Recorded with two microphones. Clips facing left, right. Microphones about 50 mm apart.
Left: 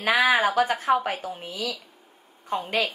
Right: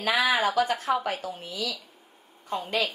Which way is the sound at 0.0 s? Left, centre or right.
Left.